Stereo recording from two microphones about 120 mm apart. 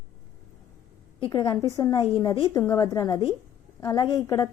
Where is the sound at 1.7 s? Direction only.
30° left (ahead or behind).